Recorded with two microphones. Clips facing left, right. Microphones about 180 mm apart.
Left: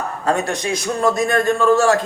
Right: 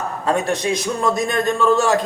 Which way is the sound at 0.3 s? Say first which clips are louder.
Right 1 dB; 20° right (ahead or behind).